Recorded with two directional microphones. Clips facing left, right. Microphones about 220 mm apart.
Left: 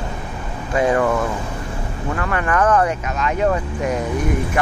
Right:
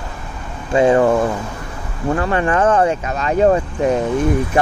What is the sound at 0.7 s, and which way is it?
Speech, 25° right (ahead or behind).